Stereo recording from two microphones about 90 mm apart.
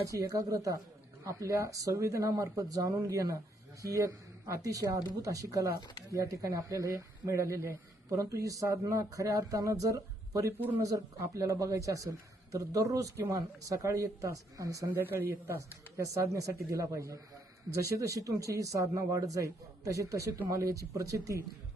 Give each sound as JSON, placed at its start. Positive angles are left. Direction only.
{"t": 0.0, "sound": "speech", "side_deg": -40}
{"t": 14.9, "sound": "speech", "side_deg": -25}